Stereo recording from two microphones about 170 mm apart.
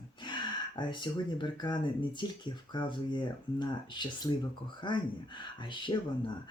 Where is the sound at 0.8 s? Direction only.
25° left (ahead or behind).